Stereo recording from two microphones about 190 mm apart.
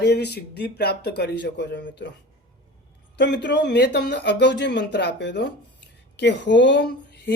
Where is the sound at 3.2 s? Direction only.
65° left (ahead or behind).